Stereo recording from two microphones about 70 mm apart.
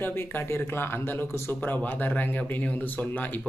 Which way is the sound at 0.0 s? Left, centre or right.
Left.